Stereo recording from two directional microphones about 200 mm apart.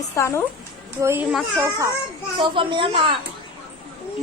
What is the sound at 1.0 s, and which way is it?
Speech, 15° right (ahead or behind).